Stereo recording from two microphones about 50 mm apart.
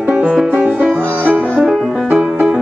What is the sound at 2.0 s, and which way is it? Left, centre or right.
Music, centre.